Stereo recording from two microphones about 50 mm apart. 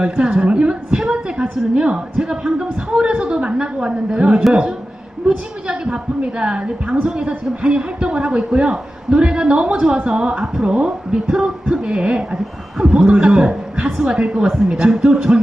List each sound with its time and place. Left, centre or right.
0.0 s a woman's voice: centre
5.2 s a woman's voice: centre